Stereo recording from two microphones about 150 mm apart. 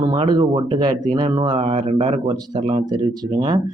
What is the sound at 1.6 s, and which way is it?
Speech, 45° right (ahead or behind).